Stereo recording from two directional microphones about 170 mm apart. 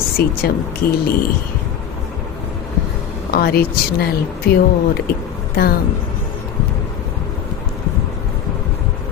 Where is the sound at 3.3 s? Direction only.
65° left (ahead or behind).